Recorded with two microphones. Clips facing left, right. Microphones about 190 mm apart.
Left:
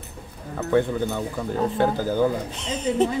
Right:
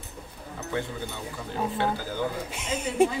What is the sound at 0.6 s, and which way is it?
Speech, 60° left (ahead or behind).